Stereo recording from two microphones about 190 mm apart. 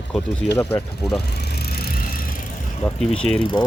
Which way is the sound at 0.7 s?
Centre (ahead or behind).